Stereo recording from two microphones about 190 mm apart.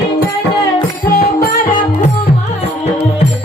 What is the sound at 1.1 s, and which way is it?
Music, 50° left (ahead or behind).